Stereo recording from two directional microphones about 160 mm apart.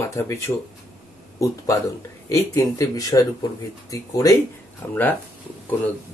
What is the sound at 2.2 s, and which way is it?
Speech, 20° left (ahead or behind).